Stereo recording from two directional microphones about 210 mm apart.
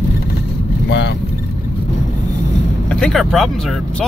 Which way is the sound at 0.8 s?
55° left (ahead or behind).